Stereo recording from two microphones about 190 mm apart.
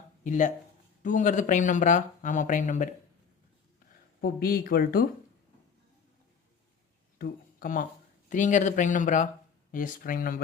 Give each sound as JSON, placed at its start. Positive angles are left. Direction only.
{"t": 0.3, "sound": "speech", "side_deg": 40}
{"t": 4.2, "sound": "speech", "side_deg": 50}
{"t": 7.2, "sound": "speech", "side_deg": 50}